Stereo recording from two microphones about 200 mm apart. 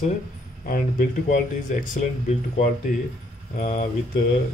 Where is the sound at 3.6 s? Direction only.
35° left (ahead or behind).